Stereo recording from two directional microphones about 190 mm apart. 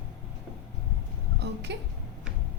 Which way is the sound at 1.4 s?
65° right (ahead or behind).